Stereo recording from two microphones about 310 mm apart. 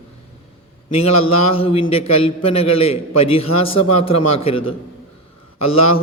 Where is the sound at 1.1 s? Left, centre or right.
Left.